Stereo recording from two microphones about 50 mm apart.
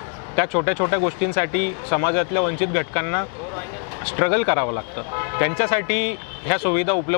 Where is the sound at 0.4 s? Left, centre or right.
Left.